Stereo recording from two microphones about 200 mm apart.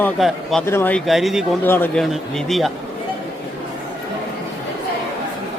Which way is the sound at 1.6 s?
10° left (ahead or behind).